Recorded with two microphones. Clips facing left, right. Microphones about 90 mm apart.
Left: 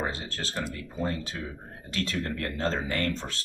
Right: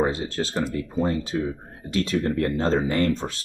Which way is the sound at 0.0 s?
15° right (ahead or behind).